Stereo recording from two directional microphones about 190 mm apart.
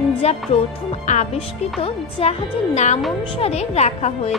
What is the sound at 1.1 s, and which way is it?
Speech, 40° left (ahead or behind).